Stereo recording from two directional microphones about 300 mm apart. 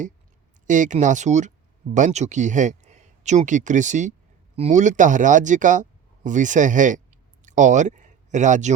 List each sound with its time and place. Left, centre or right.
0.7 s speech: right